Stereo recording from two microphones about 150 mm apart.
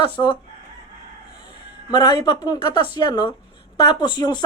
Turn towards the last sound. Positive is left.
turn(degrees=30)  # may be behind; listen again after turning